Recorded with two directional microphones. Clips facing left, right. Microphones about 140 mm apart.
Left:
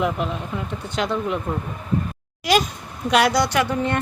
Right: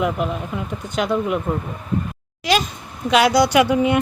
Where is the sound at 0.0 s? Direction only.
Centre (ahead or behind).